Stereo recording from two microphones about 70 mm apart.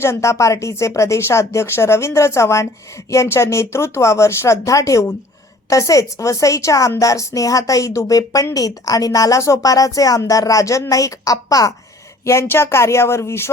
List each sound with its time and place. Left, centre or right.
0.0 s speech: left
12.2 s speech: left